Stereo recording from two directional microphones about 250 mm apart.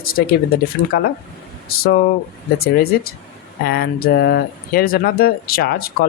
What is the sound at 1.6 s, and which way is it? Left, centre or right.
Speech, left.